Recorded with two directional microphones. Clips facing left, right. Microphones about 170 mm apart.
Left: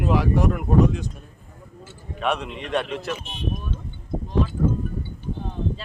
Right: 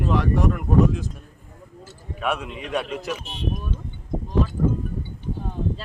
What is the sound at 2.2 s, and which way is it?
Speech, 5° right (ahead or behind).